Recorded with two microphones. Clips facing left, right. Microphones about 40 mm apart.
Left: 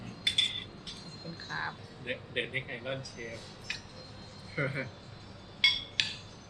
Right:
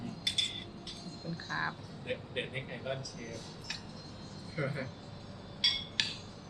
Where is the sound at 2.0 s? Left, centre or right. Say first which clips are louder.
Left 2 dB; left.